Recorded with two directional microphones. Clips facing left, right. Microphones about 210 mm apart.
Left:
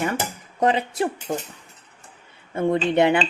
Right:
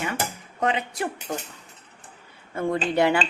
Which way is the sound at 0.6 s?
35° left (ahead or behind).